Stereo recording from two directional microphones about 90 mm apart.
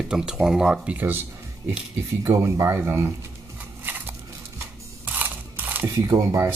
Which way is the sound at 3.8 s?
25° right (ahead or behind).